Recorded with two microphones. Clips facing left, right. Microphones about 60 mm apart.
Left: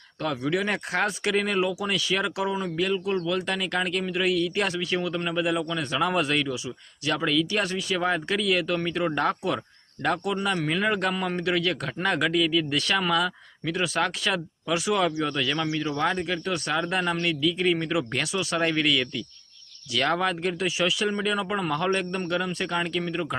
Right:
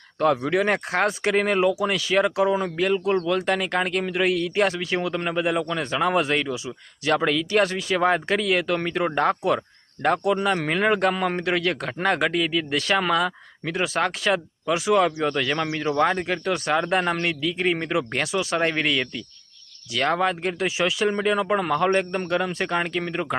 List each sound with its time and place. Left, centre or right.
0.2 s a man's voice: right